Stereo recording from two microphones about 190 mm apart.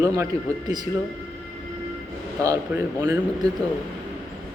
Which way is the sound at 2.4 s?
15° right (ahead or behind).